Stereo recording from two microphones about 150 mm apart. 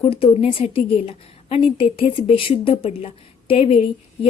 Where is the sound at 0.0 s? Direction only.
40° left (ahead or behind).